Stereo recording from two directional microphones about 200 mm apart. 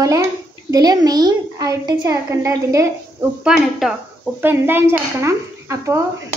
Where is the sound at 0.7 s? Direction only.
20° right (ahead or behind).